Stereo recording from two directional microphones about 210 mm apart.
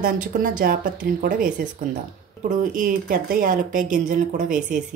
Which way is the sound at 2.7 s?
40° right (ahead or behind).